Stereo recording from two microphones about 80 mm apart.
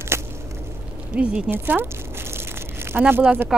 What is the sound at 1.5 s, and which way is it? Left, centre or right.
Crumpling, right.